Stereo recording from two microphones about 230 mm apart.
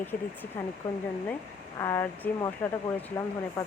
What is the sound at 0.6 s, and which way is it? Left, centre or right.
Speech, centre.